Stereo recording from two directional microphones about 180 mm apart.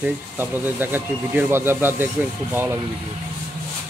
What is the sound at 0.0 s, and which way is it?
Speech, 10° right (ahead or behind).